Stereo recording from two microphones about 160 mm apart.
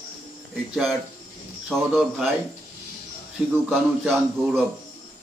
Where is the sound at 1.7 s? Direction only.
Centre (ahead or behind).